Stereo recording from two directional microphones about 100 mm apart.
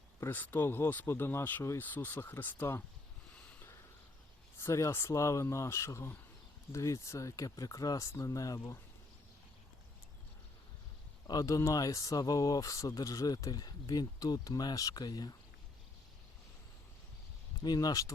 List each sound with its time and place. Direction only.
0.2 s speech: 20° left (ahead or behind)
4.6 s speech: 30° left (ahead or behind)
11.3 s speech: 35° left (ahead or behind)
17.6 s speech: 40° left (ahead or behind)